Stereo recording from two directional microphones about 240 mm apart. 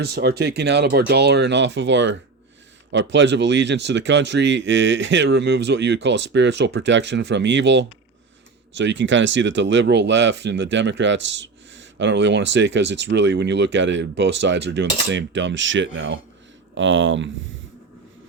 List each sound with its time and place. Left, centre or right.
0.0 s speech: right